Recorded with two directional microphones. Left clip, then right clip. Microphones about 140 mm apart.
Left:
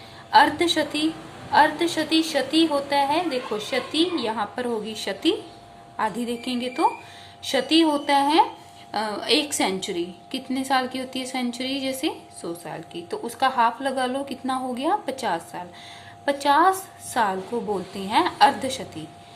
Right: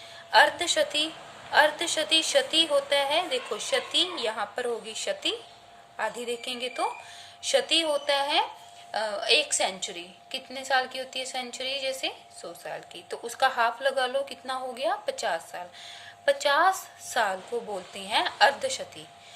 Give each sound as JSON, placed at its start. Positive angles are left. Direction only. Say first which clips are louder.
{"t": 0.3, "sound": "a woman's voice", "louder": "left 4 dB", "side_deg": -25}